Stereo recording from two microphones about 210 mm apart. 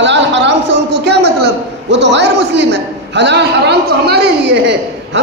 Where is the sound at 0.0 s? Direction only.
60° right (ahead or behind).